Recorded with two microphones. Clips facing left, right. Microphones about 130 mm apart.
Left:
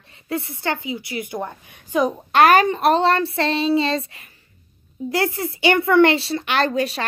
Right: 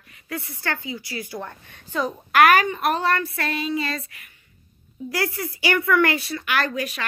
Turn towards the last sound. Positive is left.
turn(degrees=30)  # may be behind; listen again after turning